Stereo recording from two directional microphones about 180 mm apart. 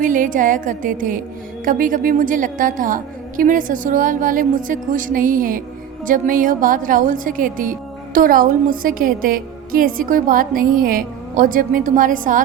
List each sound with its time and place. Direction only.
0.0 s a woman's voice: 45° right (ahead or behind)